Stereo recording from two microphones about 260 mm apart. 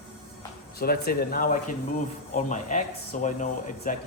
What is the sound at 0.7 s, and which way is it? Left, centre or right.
Speech, left.